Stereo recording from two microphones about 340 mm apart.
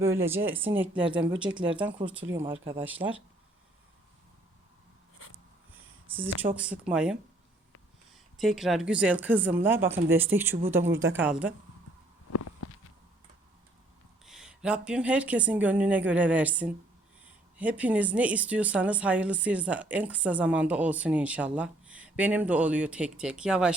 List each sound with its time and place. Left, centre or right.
0.0 s speech: centre
6.6 s speech: centre
8.4 s speech: centre
12.3 s a sound: left
14.3 s speech: centre